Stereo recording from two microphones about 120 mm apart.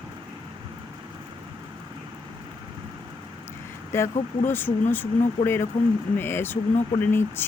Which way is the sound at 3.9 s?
20° left (ahead or behind).